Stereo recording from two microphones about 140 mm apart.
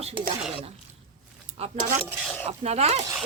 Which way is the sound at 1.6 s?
45° right (ahead or behind).